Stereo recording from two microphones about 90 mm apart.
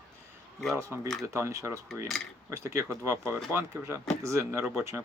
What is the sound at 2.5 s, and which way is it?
Speech, 35° right (ahead or behind).